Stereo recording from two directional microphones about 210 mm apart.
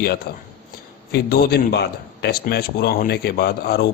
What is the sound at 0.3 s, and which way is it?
A man's voice, 45° left (ahead or behind).